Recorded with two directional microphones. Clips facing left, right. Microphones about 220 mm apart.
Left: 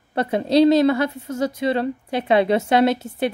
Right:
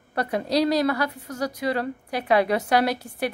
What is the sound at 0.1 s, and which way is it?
A woman's voice, 25° left (ahead or behind).